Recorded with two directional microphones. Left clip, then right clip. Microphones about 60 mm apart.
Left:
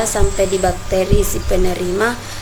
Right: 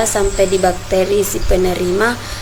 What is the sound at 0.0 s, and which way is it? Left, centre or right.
A woman's voice, centre.